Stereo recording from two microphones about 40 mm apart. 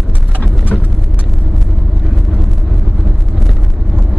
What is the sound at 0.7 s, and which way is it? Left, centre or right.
Vehicle, left.